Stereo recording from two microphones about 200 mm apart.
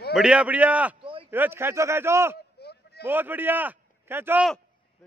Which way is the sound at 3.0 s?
10° right (ahead or behind).